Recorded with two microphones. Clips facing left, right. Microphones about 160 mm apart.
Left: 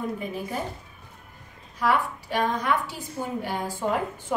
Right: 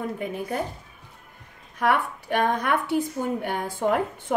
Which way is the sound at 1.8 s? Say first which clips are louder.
Right 1 dB; 55° right (ahead or behind).